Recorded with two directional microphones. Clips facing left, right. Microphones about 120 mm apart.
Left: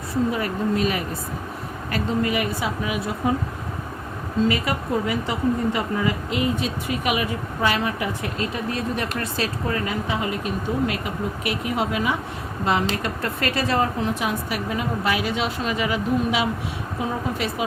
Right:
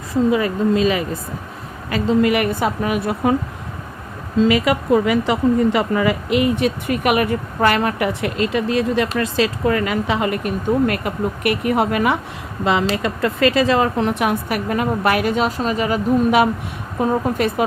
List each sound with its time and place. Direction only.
0.3 s speech: 90° right
2.2 s a woman's voice: 65° right (ahead or behind)
4.4 s speech: 90° right; by 12.1 s 55° right (ahead or behind)
12.6 s speech: 90° right
13.7 s a woman's voice: 80° right; by 17.5 s 50° right (ahead or behind)